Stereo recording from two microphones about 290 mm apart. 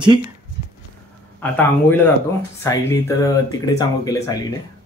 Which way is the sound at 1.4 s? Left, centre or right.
Centre.